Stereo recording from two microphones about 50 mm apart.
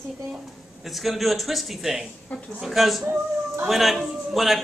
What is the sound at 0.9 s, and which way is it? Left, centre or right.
A man's voice, centre.